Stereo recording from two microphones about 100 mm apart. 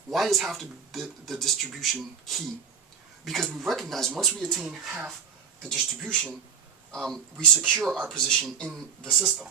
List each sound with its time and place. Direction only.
0.1 s speech: centre (ahead or behind)